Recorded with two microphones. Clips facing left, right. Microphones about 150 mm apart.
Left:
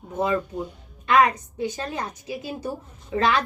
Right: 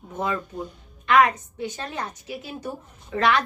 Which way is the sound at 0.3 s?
10° left (ahead or behind).